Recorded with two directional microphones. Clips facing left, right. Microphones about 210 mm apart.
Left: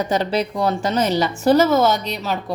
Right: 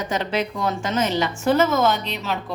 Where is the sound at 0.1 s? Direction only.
35° left (ahead or behind).